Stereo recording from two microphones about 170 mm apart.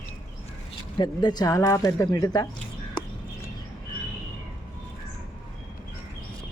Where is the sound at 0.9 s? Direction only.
25° left (ahead or behind).